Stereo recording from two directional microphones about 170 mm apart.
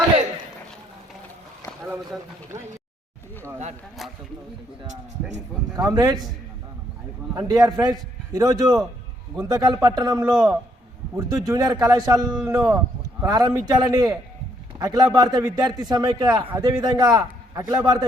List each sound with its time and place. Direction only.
5.7 s a man's voice: 20° right (ahead or behind)
7.3 s a man's voice: 25° right (ahead or behind)
10.3 s a man's voice: 5° right (ahead or behind)
11.2 s a man's voice: 20° right (ahead or behind)